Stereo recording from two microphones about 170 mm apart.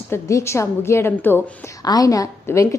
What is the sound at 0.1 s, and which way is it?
A woman's voice, 15° left (ahead or behind).